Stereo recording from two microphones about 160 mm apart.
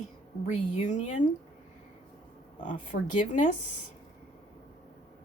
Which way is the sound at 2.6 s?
50° left (ahead or behind).